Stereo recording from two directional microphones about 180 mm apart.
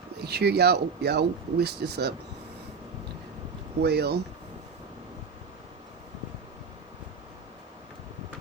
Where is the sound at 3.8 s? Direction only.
65° right (ahead or behind).